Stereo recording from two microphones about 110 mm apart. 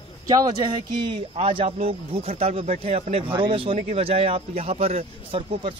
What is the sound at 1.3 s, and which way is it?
A man's voice, 60° right (ahead or behind).